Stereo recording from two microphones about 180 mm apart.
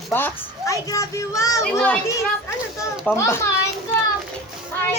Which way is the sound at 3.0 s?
15° left (ahead or behind).